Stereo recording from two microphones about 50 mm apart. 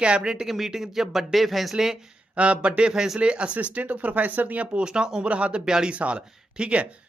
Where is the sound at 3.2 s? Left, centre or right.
Right.